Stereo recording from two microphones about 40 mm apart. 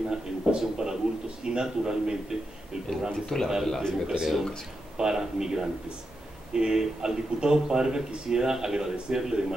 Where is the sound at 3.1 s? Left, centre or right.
Centre.